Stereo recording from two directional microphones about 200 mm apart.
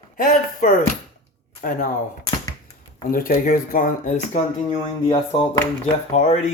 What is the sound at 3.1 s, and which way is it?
Speech, 45° left (ahead or behind).